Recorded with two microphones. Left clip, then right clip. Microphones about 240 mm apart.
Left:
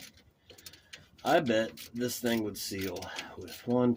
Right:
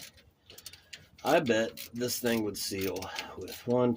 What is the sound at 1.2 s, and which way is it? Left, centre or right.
Speech, right.